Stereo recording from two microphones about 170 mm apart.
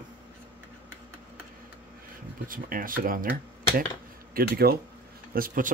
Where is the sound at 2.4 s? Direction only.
55° right (ahead or behind).